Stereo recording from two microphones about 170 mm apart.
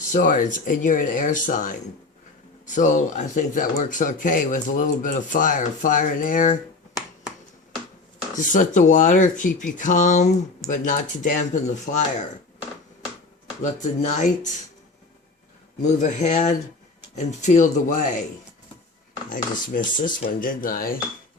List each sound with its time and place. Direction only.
0.1 s speech: 50° left (ahead or behind)
8.4 s speech: 50° left (ahead or behind)
13.6 s speech: 45° left (ahead or behind)
15.8 s speech: 45° left (ahead or behind)
19.3 s speech: 50° left (ahead or behind)